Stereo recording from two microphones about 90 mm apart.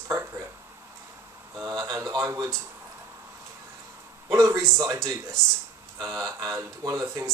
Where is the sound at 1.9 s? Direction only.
40° right (ahead or behind).